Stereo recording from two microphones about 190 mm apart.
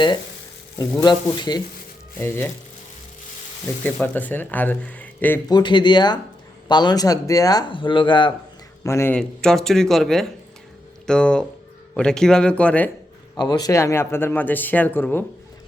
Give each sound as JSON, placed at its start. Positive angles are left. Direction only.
{"t": 0.8, "sound": "speech", "side_deg": 20}
{"t": 3.8, "sound": "speech", "side_deg": 10}
{"t": 5.5, "sound": "speech", "side_deg": 25}
{"t": 8.8, "sound": "speech", "side_deg": 15}
{"t": 13.3, "sound": "speech", "side_deg": 20}